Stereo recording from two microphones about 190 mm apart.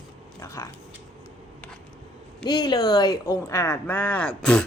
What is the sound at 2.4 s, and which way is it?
Speech, 20° left (ahead or behind).